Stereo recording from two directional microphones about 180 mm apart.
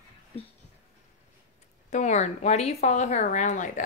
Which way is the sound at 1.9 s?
40° left (ahead or behind).